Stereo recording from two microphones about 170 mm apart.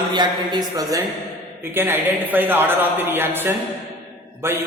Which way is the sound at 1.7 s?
10° right (ahead or behind).